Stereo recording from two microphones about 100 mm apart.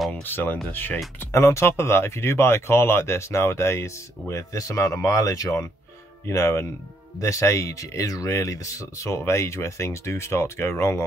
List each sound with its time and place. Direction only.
0.2 s speech: 20° left (ahead or behind)